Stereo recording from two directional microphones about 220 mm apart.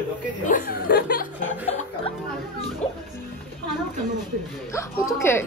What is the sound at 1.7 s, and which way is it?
Music, 30° left (ahead or behind).